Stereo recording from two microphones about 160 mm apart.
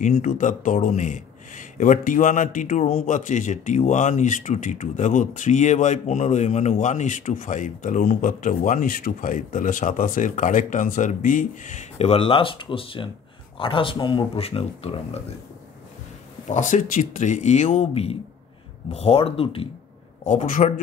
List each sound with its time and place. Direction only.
0.0 s speech: 50° left (ahead or behind)
16.5 s speech: 50° left (ahead or behind)
20.2 s speech: 50° left (ahead or behind)